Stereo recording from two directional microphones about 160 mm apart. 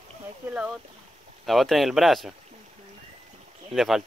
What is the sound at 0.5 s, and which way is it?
Speech, 5° right (ahead or behind).